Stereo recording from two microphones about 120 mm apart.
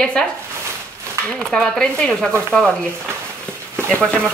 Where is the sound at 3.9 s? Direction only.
10° left (ahead or behind).